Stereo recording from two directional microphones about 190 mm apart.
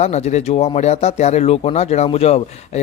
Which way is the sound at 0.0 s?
35° left (ahead or behind).